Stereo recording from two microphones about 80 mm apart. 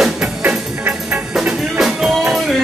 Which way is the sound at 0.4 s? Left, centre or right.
Right.